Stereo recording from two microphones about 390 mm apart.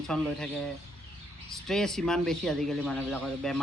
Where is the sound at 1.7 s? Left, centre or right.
Centre.